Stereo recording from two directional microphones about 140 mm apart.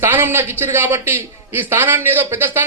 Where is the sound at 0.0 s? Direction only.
15° right (ahead or behind).